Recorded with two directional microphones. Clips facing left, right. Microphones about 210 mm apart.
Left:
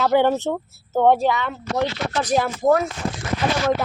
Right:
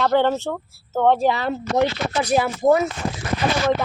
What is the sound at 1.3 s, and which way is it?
Speech, 35° right (ahead or behind).